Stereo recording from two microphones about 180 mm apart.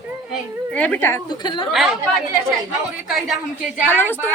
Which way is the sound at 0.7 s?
10° left (ahead or behind).